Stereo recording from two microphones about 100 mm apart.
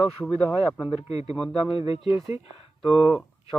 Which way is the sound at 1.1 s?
90° left.